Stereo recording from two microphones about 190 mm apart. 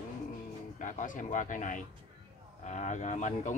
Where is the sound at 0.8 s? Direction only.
45° left (ahead or behind).